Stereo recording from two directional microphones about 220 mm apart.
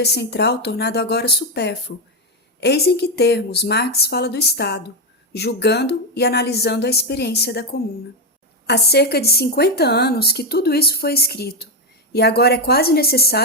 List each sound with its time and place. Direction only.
0.0 s a woman's voice: 50° left (ahead or behind)